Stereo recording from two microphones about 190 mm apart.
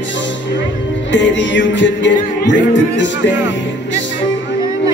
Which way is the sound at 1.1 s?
70° left (ahead or behind).